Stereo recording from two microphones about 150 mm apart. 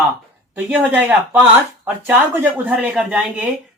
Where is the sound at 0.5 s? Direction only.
10° right (ahead or behind).